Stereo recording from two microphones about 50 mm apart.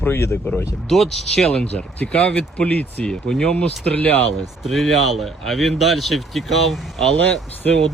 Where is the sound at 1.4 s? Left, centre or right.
Left.